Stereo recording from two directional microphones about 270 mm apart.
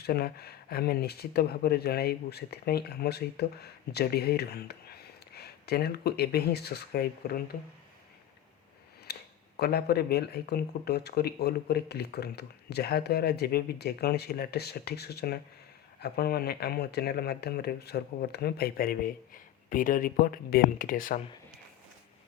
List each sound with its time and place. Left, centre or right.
0.0 s speech: left
9.1 s a sound: left
9.6 s speech: left